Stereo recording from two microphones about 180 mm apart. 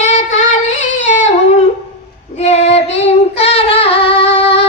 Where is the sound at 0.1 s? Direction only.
40° left (ahead or behind).